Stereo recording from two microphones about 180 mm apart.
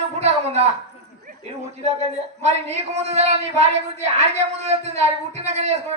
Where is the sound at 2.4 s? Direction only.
40° right (ahead or behind).